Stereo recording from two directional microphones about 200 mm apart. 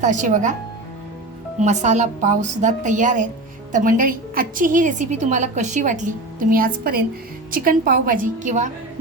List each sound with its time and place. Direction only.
0.0 s a woman's voice: 40° right (ahead or behind)
1.6 s a woman's voice: 35° right (ahead or behind)